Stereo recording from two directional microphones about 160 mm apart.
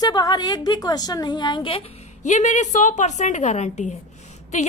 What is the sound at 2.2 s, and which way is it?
A woman's voice, 45° left (ahead or behind).